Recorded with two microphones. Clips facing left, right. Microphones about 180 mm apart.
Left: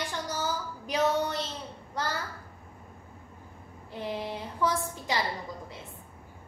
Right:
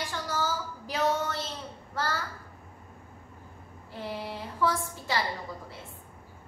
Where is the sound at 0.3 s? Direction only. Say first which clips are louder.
Right 1 dB; 20° left (ahead or behind).